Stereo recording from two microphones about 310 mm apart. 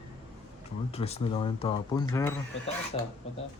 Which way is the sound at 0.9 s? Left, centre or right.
Centre.